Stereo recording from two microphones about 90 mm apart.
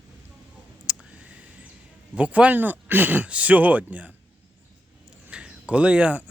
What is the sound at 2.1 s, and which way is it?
Speech, 15° right (ahead or behind).